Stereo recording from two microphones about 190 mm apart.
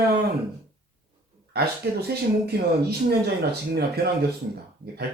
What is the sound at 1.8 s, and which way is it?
Speech, 60° right (ahead or behind).